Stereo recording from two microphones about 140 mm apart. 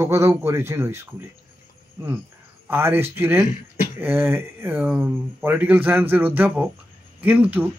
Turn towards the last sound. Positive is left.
turn(degrees=-10)  # may be behind; listen again after turning